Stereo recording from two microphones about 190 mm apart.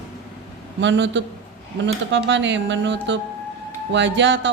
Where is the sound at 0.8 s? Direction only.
70° right (ahead or behind).